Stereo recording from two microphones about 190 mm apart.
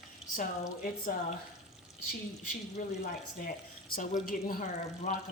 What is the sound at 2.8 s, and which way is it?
Speech, 40° left (ahead or behind).